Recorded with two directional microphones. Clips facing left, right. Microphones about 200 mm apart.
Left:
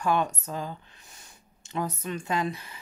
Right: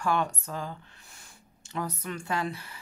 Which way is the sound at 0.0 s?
20° left (ahead or behind).